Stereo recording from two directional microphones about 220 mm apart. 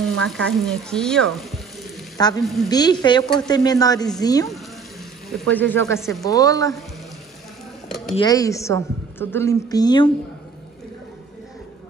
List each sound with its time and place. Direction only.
0.0 s frying: centre (ahead or behind)
2.1 s frying: 15° left (ahead or behind)
2.4 s speech: centre (ahead or behind)
2.7 s a woman's voice: 20° left (ahead or behind)
5.5 s a woman's voice: 10° left (ahead or behind)
8.2 s a woman's voice: 15° left (ahead or behind)